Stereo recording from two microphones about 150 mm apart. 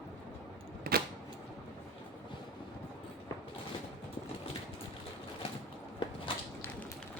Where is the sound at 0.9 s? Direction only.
75° right (ahead or behind).